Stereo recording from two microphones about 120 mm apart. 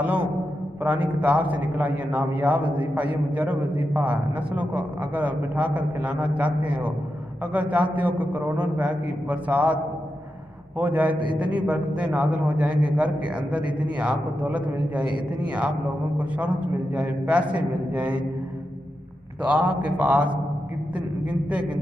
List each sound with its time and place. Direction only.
0.8 s a man's voice: 15° right (ahead or behind)
10.8 s a man's voice: 15° right (ahead or behind)
19.4 s a man's voice: 10° right (ahead or behind)